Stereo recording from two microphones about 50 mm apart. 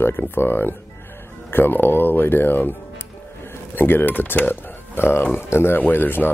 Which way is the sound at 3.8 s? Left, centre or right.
Left.